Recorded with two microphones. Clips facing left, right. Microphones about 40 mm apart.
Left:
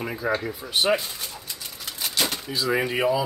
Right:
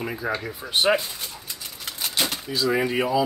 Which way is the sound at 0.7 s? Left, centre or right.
Right.